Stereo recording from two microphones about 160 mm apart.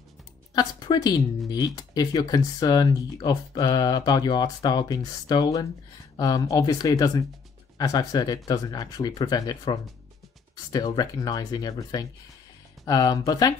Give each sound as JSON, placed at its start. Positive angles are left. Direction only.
{"t": 0.6, "sound": "speech", "side_deg": 25}